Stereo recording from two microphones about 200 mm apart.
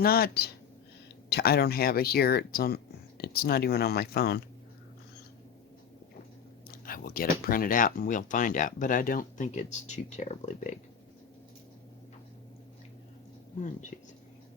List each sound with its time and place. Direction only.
0.0 s speech: 50° left (ahead or behind)
6.7 s speech: 45° left (ahead or behind)